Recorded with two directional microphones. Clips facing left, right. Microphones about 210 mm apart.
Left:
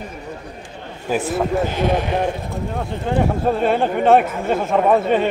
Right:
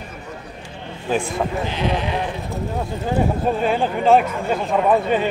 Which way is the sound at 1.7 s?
50° left (ahead or behind).